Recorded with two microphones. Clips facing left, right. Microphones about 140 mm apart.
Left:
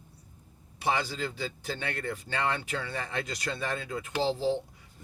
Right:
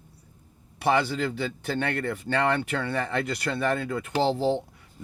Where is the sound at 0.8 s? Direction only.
60° right (ahead or behind).